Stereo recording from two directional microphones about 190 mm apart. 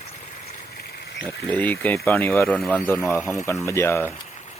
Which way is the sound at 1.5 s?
10° left (ahead or behind).